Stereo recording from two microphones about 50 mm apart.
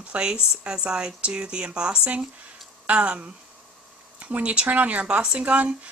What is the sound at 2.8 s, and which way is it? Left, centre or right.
Speech, right.